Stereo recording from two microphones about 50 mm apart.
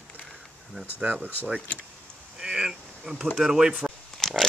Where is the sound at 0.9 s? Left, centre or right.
Right.